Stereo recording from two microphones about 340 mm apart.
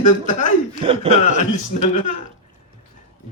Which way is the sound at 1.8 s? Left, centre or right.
Left.